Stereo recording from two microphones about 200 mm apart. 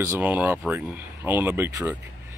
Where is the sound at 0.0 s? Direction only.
10° right (ahead or behind).